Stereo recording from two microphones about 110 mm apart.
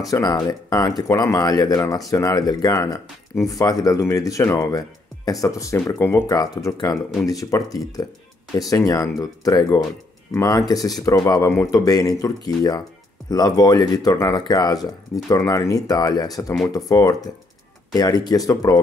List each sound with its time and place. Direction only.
0.1 s speech: 35° left (ahead or behind)
6.2 s speech: 35° left (ahead or behind)